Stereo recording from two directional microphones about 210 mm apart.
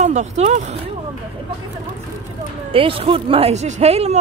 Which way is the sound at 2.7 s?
25° right (ahead or behind).